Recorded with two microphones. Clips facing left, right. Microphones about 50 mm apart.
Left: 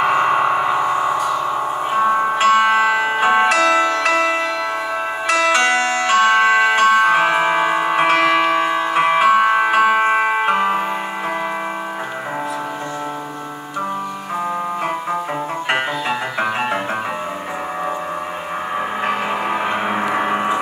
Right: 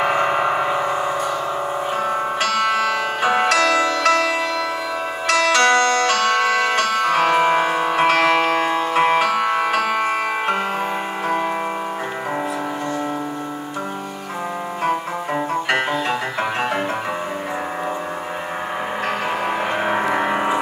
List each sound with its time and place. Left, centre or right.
0.0 s music: centre
19.6 s music: centre